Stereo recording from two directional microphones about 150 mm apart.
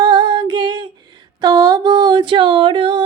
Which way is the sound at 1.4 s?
25° right (ahead or behind).